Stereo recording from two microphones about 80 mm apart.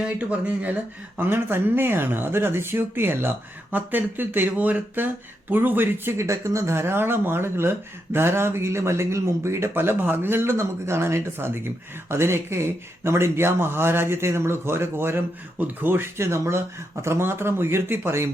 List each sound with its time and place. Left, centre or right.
0.0 s a man's voice: centre